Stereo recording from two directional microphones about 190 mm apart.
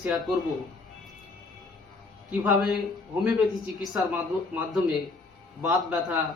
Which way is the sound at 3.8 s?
Centre (ahead or behind).